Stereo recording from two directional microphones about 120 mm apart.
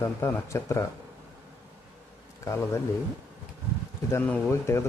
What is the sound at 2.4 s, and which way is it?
Speech, 25° left (ahead or behind).